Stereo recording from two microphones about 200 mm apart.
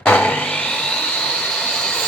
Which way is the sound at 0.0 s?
5° left (ahead or behind).